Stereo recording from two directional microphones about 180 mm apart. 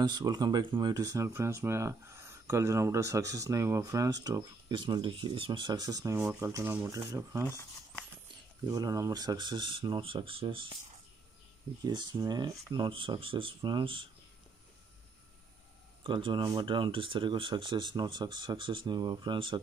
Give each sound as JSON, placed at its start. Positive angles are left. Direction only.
{"t": 0.0, "sound": "speech", "side_deg": -25}
{"t": 8.6, "sound": "speech", "side_deg": -20}
{"t": 11.8, "sound": "speech", "side_deg": -25}
{"t": 16.0, "sound": "speech", "side_deg": -30}